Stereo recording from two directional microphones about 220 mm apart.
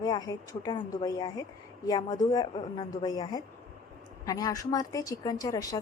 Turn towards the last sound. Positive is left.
turn(degrees=15)  # may be behind; listen again after turning